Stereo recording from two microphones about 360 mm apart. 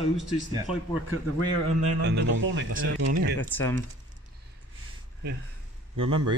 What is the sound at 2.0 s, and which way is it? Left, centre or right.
Speech, right.